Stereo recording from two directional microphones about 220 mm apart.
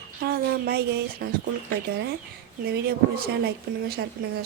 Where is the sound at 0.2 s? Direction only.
45° right (ahead or behind).